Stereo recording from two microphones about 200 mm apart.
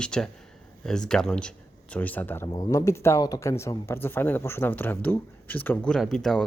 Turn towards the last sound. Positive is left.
turn(degrees=0)  # may be behind; listen again after turning